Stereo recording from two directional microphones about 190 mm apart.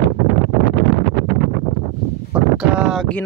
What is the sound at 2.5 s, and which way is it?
Wind noise, 5° right (ahead or behind).